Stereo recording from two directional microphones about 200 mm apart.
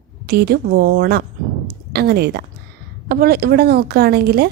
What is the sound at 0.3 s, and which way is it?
A woman's voice, 50° right (ahead or behind).